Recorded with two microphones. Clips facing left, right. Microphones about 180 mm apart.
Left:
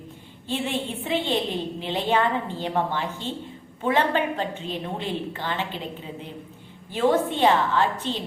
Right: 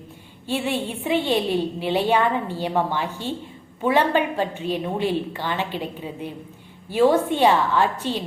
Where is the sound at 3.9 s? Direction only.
10° right (ahead or behind).